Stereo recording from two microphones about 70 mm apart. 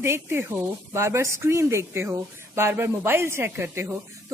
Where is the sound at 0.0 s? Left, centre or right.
Right.